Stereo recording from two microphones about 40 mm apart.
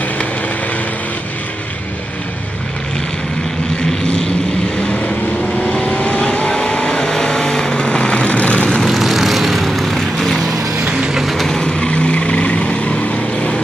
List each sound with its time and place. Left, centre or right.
4.8 s vehicle: left
8.8 s vehicle: centre
11.0 s a sound: centre
11.4 s vehicle: centre